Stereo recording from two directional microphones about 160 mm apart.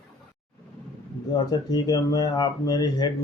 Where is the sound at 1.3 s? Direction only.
25° left (ahead or behind).